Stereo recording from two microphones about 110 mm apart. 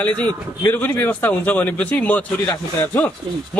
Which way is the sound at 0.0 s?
15° left (ahead or behind).